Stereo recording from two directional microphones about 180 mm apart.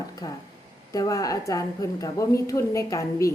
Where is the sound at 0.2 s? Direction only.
20° left (ahead or behind).